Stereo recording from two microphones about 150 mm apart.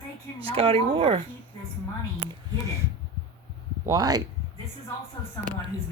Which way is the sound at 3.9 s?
25° right (ahead or behind).